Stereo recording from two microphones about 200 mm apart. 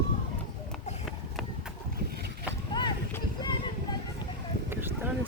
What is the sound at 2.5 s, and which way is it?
Boat, 20° left (ahead or behind).